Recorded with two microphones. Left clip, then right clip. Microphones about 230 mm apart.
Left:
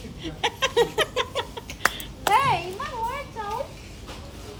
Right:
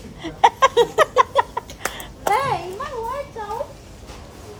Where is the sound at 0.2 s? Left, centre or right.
Centre.